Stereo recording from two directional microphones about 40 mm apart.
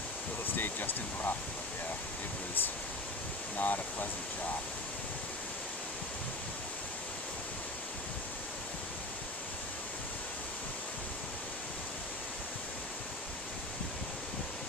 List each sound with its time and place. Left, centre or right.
0.6 s speech: left
3.5 s speech: left